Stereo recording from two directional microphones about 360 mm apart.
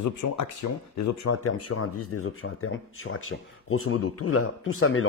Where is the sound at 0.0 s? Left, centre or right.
Left.